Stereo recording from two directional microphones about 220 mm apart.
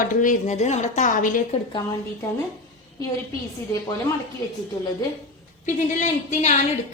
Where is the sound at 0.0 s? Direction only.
35° left (ahead or behind).